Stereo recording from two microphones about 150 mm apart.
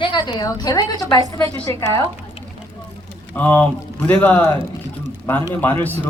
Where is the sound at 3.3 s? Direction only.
10° left (ahead or behind).